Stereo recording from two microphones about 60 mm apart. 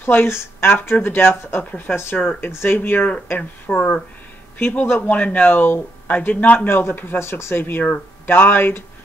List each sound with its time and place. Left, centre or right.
0.0 s speech: left
2.0 s speech: left
3.7 s speech: centre
4.6 s speech: left
5.0 s speech: left
6.7 s speech: left